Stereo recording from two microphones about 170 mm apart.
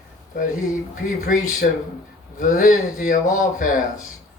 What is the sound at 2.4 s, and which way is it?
Speech, 50° left (ahead or behind).